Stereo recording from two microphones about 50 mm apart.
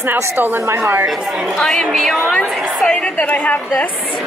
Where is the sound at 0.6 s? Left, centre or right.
Right.